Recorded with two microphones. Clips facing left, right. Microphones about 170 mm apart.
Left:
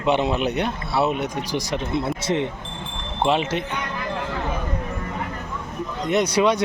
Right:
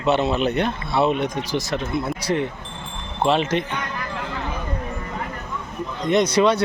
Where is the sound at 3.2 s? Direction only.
10° left (ahead or behind).